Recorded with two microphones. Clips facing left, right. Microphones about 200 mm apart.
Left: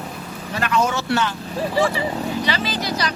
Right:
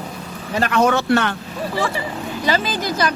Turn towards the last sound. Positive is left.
turn(degrees=-50)  # may be behind; listen again after turning